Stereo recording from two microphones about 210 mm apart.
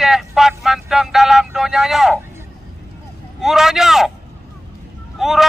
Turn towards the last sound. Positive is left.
turn(degrees=0)  # may be behind; listen again after turning